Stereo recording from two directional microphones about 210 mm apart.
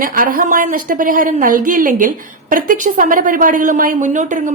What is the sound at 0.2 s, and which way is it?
A woman's voice, 40° right (ahead or behind).